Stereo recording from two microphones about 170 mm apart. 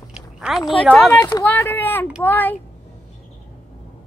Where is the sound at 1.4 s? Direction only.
10° left (ahead or behind).